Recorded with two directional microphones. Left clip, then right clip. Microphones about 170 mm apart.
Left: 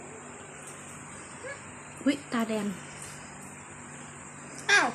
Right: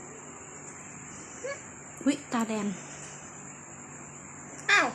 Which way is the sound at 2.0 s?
10° right (ahead or behind).